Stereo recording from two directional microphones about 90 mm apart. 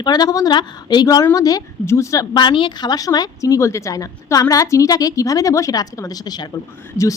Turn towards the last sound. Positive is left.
turn(degrees=30)  # may be behind; listen again after turning